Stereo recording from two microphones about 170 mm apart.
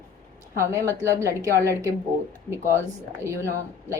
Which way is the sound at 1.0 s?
20° right (ahead or behind).